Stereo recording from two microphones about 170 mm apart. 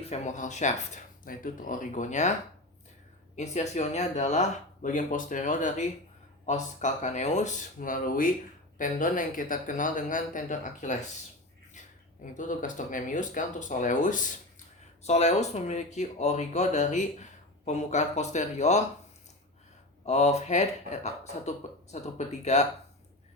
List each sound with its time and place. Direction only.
0.0 s speech: 40° left (ahead or behind)
3.3 s speech: 40° left (ahead or behind)
12.2 s speech: 50° left (ahead or behind)
20.1 s speech: 40° left (ahead or behind)